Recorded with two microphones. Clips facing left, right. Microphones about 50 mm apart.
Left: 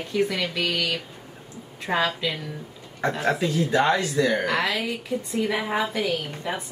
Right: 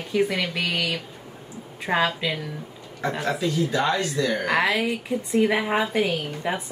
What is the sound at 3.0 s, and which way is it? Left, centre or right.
Speech, centre.